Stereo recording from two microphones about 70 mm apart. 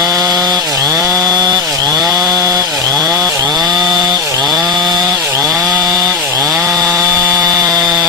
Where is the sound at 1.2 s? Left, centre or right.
Right.